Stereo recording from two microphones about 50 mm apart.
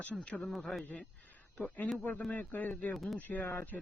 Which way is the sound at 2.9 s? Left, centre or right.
Centre.